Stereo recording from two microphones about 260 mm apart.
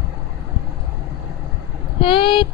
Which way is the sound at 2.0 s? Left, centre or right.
Centre.